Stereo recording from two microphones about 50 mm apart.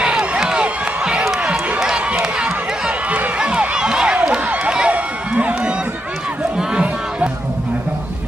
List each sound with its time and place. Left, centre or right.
0.0 s crowd: centre
2.1 s a sound: centre
6.6 s music: right